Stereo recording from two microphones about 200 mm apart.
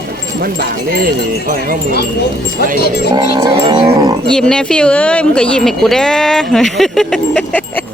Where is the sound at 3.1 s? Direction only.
20° right (ahead or behind).